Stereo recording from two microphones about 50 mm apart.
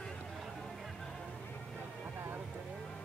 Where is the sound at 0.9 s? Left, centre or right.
Centre.